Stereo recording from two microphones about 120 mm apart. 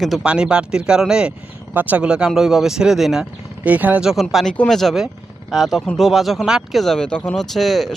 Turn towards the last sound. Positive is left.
turn(degrees=0)  # may be behind; listen again after turning